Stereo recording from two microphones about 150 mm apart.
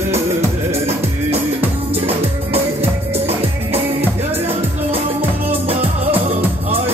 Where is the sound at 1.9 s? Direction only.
40° right (ahead or behind).